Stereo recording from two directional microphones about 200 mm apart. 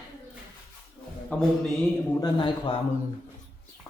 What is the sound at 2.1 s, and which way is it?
Speech, 20° left (ahead or behind).